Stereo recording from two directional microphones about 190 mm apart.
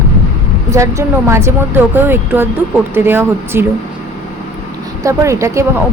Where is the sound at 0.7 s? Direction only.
15° right (ahead or behind).